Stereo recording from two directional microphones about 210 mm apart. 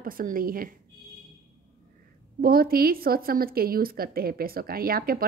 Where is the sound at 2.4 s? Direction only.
45° right (ahead or behind).